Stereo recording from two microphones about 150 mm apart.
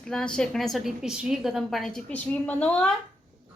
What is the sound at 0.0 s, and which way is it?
A woman's voice, 5° left (ahead or behind).